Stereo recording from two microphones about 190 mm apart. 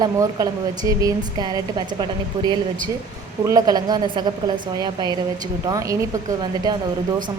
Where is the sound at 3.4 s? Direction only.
20° right (ahead or behind).